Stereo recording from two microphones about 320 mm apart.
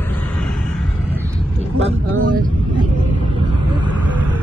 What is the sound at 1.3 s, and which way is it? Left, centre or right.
Vehicle, right.